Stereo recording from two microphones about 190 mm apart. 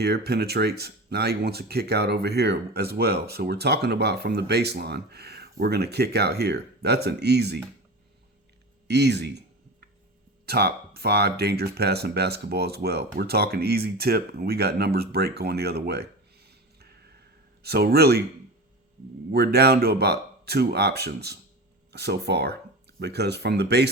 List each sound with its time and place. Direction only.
0.0 s speech: 60° right (ahead or behind)
8.9 s speech: 60° right (ahead or behind)
10.4 s speech: 55° right (ahead or behind)
19.3 s speech: 55° right (ahead or behind)